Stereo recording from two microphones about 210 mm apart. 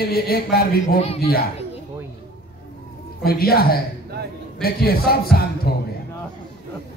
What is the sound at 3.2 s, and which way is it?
Speech, 45° left (ahead or behind).